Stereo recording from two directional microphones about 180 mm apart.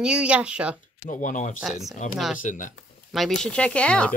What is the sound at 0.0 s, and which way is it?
Speech, 5° right (ahead or behind).